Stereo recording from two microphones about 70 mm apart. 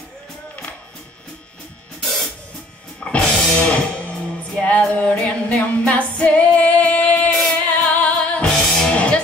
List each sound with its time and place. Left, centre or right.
2.0 s music: centre
3.0 s music: centre